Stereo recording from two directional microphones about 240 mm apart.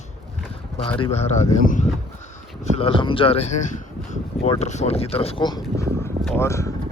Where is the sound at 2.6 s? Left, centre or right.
Left.